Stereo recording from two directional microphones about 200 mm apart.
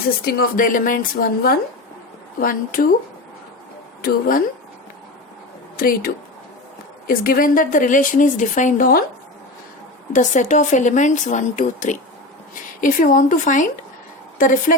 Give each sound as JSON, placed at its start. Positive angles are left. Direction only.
{"t": 0.3, "sound": "a woman's voice", "side_deg": 50}
{"t": 2.4, "sound": "a woman's voice", "side_deg": 45}
{"t": 4.0, "sound": "a woman's voice", "side_deg": 45}
{"t": 5.7, "sound": "a woman's voice", "side_deg": 45}
{"t": 7.1, "sound": "a woman's voice", "side_deg": 45}
{"t": 10.1, "sound": "speech", "side_deg": 40}